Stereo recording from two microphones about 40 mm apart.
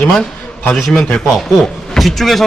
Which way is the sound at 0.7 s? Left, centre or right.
Centre.